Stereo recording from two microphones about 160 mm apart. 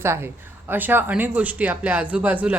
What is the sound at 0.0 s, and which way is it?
A woman's voice, 15° right (ahead or behind).